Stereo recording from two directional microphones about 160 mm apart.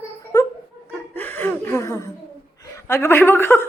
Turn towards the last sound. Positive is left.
turn(degrees=15)  # may be behind; listen again after turning